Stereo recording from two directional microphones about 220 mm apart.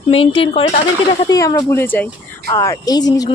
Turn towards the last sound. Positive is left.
turn(degrees=15)  # may be behind; listen again after turning